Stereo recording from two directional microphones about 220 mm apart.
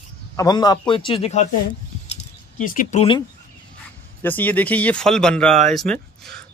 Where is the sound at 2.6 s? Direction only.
40° left (ahead or behind).